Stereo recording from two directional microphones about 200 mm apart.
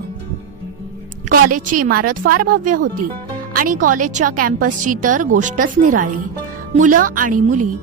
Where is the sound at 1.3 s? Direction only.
40° right (ahead or behind).